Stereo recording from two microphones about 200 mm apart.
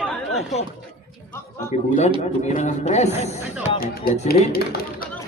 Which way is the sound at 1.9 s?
35° left (ahead or behind).